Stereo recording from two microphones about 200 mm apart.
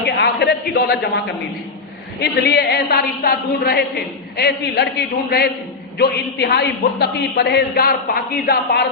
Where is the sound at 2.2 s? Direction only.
55° left (ahead or behind).